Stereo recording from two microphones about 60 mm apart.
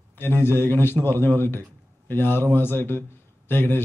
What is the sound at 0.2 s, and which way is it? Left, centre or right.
A man's voice, left.